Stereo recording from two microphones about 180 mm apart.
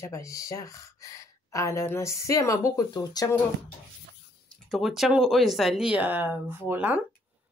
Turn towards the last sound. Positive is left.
turn(degrees=-10)  # may be behind; listen again after turning